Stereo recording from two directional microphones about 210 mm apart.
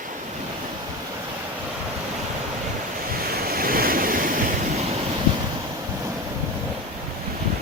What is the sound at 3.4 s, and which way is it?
Waves, 45° right (ahead or behind).